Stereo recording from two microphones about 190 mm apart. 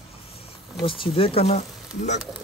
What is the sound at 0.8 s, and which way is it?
Speech, 25° left (ahead or behind).